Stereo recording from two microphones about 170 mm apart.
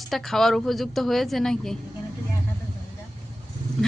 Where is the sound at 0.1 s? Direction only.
Centre (ahead or behind).